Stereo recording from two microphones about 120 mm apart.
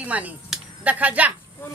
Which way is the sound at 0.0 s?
15° right (ahead or behind).